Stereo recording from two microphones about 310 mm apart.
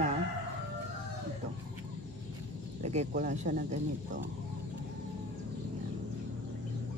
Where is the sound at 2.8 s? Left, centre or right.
Right.